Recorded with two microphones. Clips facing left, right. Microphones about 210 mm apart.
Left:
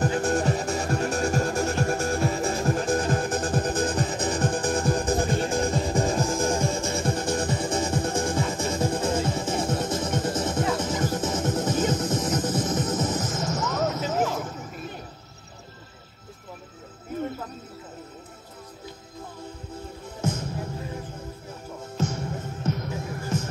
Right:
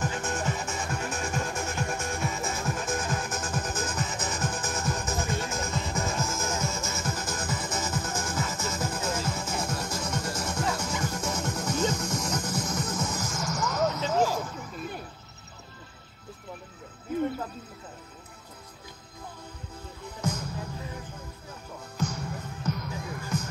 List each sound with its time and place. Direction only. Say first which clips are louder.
0.0 s music: left 7 dB; 35° left (ahead or behind)
14.4 s a sound: left 3 dB; 25° left (ahead or behind)
20.2 s music: left 3 dB; 25° left (ahead or behind)